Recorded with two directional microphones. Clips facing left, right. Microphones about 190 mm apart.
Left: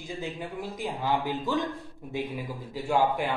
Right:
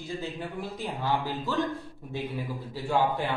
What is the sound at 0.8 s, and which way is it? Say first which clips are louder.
Speech: left 1 dB; 15° left (ahead or behind).